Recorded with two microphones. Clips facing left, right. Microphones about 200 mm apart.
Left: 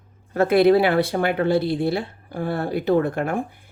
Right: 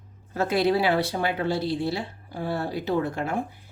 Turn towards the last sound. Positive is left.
turn(degrees=55)  # may be behind; listen again after turning